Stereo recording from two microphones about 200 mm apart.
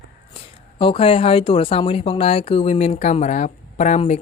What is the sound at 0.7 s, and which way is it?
Speech, 25° left (ahead or behind).